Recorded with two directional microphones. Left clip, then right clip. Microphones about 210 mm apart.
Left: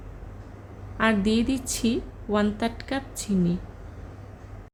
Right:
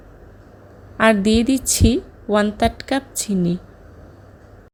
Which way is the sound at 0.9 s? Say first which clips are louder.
Right 8 dB; 30° right (ahead or behind).